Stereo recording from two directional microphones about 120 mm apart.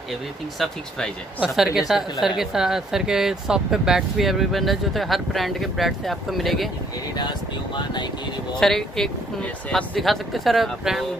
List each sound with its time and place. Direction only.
0.6 s speech: 5° left (ahead or behind)
1.4 s a woman's voice: 5° right (ahead or behind)
7.2 s speech: 40° left (ahead or behind)
8.5 s a woman's voice: 5° left (ahead or behind)